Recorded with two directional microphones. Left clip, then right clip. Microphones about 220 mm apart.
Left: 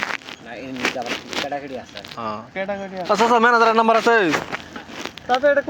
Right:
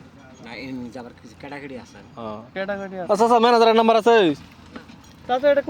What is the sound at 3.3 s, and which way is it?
Speech, 15° right (ahead or behind).